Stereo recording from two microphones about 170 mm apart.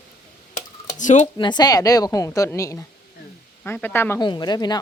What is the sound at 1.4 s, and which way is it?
A woman's voice, 25° left (ahead or behind).